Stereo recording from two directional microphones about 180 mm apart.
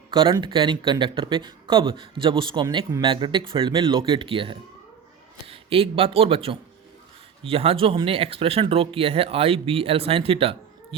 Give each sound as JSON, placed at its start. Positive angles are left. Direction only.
{"t": 0.1, "sound": "speech", "side_deg": -25}